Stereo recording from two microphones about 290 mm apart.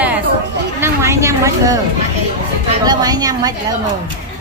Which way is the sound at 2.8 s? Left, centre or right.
Centre.